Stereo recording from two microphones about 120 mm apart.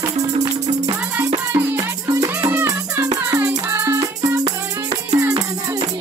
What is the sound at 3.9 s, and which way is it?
Music, 30° right (ahead or behind).